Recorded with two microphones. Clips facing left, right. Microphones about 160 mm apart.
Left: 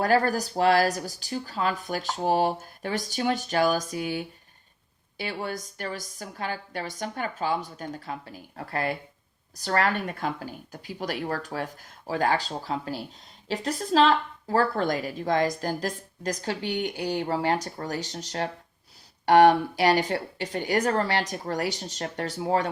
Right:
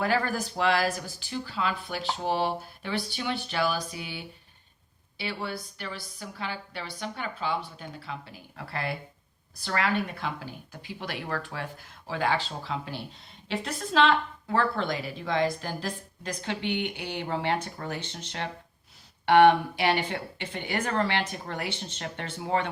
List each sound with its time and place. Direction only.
0.0 s a woman's voice: 40° left (ahead or behind)